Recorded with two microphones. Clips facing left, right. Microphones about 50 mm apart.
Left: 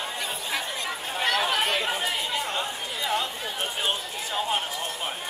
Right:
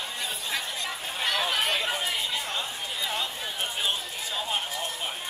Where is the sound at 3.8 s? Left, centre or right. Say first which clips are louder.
Left 2 dB; left.